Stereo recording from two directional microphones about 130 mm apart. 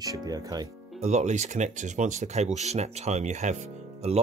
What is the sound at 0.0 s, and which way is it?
Speech, 30° right (ahead or behind).